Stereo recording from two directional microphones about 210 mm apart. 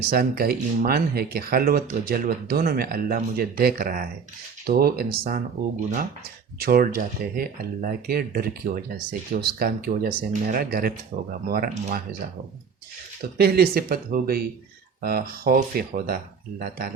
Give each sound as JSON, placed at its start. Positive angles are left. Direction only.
{"t": 0.1, "sound": "speech", "side_deg": -45}
{"t": 6.6, "sound": "speech", "side_deg": -45}
{"t": 13.3, "sound": "speech", "side_deg": -45}